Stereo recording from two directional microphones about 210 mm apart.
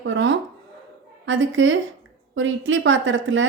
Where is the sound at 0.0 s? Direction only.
65° right (ahead or behind).